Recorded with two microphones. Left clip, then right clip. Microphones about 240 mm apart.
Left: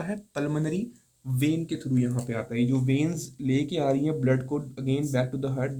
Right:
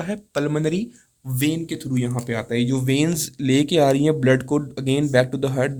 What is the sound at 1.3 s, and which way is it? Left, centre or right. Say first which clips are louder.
Speech: right 4 dB; right.